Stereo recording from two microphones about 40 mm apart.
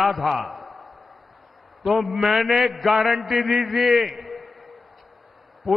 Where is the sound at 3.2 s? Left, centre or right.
Right.